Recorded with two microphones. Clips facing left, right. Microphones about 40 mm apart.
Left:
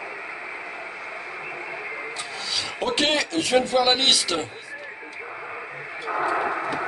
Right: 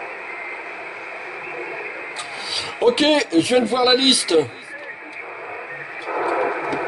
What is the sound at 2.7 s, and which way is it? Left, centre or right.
Speech, centre.